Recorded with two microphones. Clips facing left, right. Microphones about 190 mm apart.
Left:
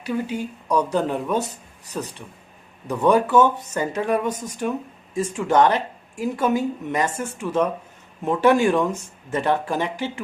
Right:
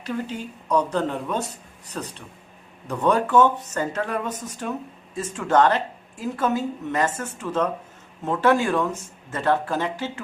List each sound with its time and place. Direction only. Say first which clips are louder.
0.0 s speech: left 4 dB; 10° left (ahead or behind)